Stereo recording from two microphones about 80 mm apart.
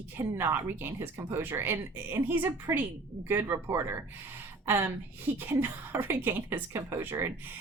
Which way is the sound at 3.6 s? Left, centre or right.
Right.